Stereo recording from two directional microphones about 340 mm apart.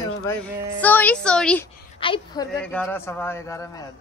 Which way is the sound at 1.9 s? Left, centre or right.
Centre.